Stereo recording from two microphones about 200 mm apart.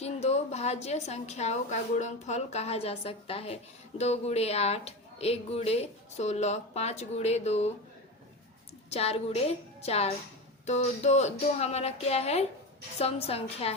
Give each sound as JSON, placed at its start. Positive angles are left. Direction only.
{"t": 0.0, "sound": "a woman's voice", "side_deg": 30}
{"t": 8.9, "sound": "a woman's voice", "side_deg": 30}